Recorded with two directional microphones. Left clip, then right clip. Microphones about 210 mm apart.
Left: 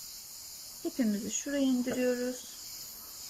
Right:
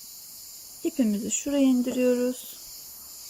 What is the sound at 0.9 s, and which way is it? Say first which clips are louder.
Speech: right 5 dB; 15° right (ahead or behind).